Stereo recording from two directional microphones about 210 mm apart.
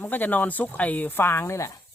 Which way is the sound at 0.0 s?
10° left (ahead or behind).